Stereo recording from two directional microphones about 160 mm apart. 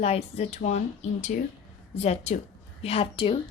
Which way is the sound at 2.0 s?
40° left (ahead or behind).